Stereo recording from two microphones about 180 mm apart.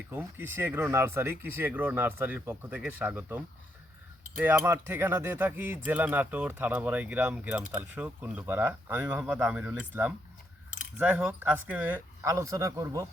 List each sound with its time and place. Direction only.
0.1 s speech: 10° right (ahead or behind)